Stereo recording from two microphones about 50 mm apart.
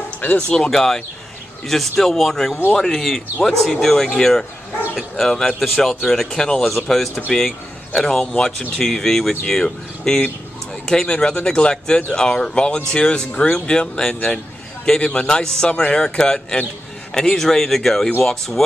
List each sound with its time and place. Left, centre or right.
0.2 s speech: left
0.6 s a man's voice: centre